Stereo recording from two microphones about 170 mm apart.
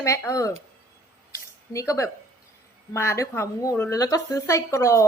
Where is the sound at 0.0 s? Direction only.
20° left (ahead or behind).